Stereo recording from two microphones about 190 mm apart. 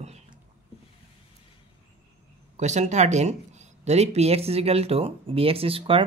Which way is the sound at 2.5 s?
40° right (ahead or behind).